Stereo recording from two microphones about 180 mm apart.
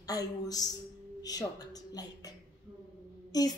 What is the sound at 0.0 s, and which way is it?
A woman's voice, 20° left (ahead or behind).